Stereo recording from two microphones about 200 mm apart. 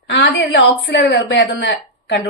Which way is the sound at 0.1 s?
60° left (ahead or behind).